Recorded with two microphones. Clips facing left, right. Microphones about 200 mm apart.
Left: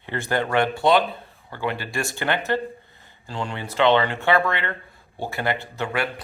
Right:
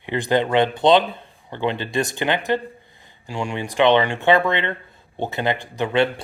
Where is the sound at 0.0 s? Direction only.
15° right (ahead or behind).